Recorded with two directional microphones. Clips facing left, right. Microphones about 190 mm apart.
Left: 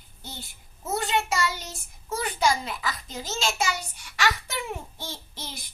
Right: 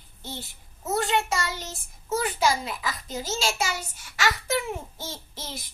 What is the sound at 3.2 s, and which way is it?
Speech, 5° right (ahead or behind).